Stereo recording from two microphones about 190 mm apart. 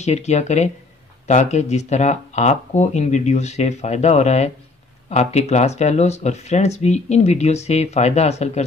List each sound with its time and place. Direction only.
0.0 s speech: 35° left (ahead or behind)